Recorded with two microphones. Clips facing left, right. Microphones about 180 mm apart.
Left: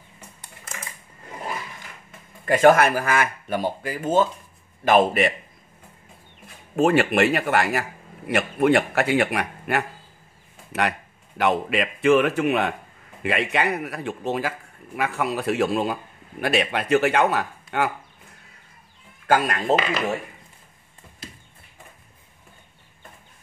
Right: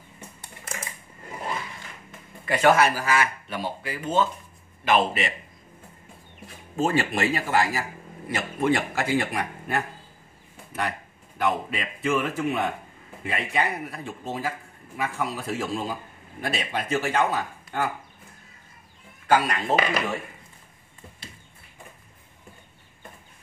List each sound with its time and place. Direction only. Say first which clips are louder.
2.4 s speech: left 4 dB; 45° left (ahead or behind)
6.8 s a man's voice: left 6 dB; 65° left (ahead or behind)
19.2 s speech: left 1 dB; 50° left (ahead or behind)